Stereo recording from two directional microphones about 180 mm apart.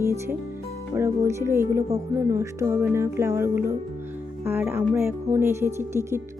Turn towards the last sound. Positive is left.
turn(degrees=-15)  # may be behind; listen again after turning